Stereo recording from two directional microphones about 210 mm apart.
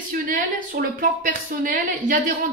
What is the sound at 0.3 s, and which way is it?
A woman's voice, 40° right (ahead or behind).